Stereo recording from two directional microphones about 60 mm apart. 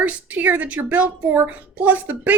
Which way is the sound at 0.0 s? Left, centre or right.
Right.